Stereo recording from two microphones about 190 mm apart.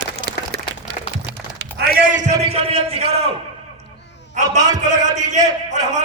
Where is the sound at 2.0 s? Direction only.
45° right (ahead or behind).